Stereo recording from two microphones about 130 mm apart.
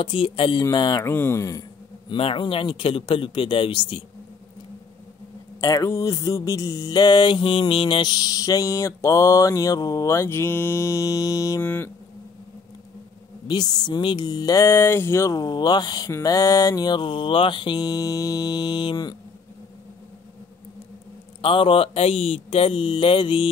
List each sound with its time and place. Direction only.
0.0 s mantra: 45° left (ahead or behind)
1.0 s music: 20° left (ahead or behind)
2.0 s mantra: 40° left (ahead or behind)
5.6 s music: 25° left (ahead or behind)
13.5 s mantra: 35° left (ahead or behind)
21.4 s speech: 40° left (ahead or behind)